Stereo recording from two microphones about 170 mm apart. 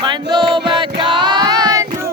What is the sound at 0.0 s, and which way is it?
Choir, 25° right (ahead or behind).